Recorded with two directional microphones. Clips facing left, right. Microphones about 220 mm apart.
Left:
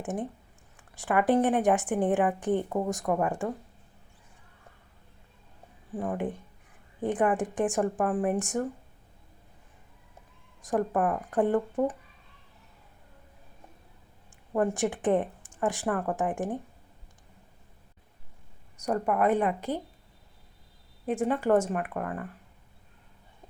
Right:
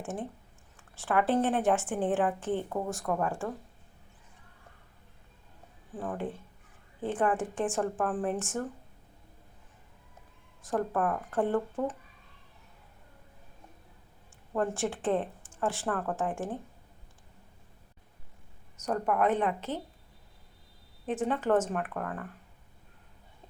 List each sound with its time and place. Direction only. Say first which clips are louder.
0.0 s a woman's voice: left 4 dB; 15° left (ahead or behind)
6.0 s a woman's voice: left 4 dB; 15° left (ahead or behind)
10.6 s a woman's voice: left 3 dB; 15° left (ahead or behind)
14.5 s a woman's voice: left 4 dB; 15° left (ahead or behind)
18.8 s a woman's voice: left 2 dB; 10° left (ahead or behind)
21.1 s a woman's voice: left 3 dB; 10° left (ahead or behind)